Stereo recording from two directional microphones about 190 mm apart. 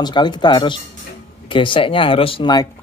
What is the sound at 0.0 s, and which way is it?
Speech, 25° left (ahead or behind).